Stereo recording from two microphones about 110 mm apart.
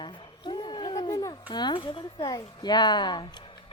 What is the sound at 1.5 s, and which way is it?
A woman's voice, 45° left (ahead or behind).